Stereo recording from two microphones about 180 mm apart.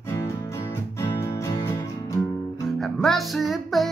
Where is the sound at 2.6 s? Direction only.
Centre (ahead or behind).